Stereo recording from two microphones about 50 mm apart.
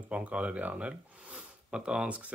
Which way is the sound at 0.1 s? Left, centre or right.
Right.